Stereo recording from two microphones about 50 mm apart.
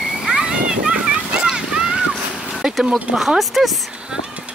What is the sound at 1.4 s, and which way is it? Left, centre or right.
Boat, centre.